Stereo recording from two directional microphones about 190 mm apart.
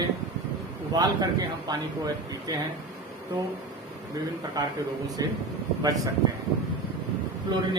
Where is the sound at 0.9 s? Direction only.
20° right (ahead or behind).